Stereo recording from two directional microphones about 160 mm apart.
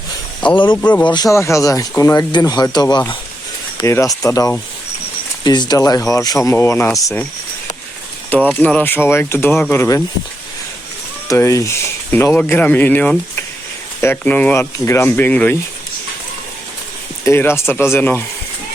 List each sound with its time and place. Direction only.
0.4 s speech: 30° left (ahead or behind)
0.8 s speech: 10° left (ahead or behind)
1.1 s speech: 20° left (ahead or behind)
8.3 s speech: 10° left (ahead or behind)
11.3 s speech: 20° left (ahead or behind)
17.2 s speech: 15° left (ahead or behind)